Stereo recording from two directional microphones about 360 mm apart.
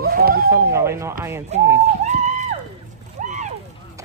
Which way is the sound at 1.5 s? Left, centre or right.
Centre.